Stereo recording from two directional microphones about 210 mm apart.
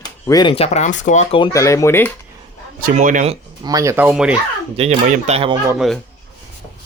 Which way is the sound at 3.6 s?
15° right (ahead or behind).